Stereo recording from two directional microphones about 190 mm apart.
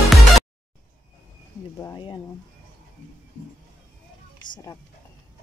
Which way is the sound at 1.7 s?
20° left (ahead or behind).